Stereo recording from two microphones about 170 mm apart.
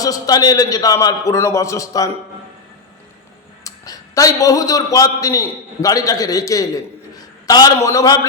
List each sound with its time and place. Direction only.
0.0 s a man's voice: 20° left (ahead or behind)
3.6 s a man's voice: 20° left (ahead or behind)